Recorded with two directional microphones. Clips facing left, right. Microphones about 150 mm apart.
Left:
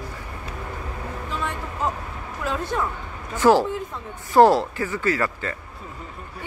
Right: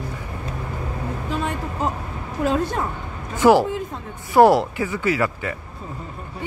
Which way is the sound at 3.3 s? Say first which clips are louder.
Right 2 dB; 15° right (ahead or behind).